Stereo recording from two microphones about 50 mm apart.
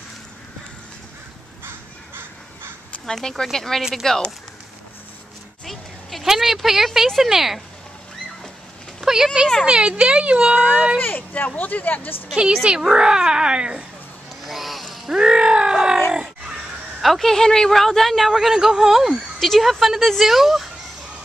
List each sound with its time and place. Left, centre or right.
1.6 s crow: right
3.1 s speech: centre
5.7 s a sound: centre
6.2 s speech: centre
9.0 s speech: centre
11.0 s speech: left
12.6 s a child's voice: centre
14.4 s a sound: centre
15.1 s a sound: centre
17.0 s speech: centre